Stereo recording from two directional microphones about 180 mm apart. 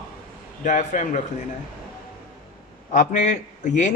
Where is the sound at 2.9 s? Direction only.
45° left (ahead or behind).